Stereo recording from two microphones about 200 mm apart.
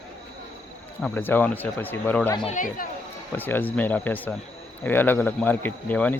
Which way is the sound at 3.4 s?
10° left (ahead or behind).